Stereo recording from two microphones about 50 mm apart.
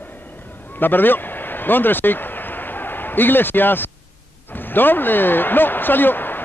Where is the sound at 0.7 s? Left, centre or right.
Left.